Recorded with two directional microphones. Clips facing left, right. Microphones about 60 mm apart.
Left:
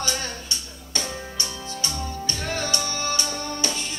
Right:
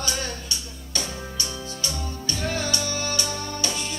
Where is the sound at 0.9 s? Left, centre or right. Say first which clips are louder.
Left 1 dB; left.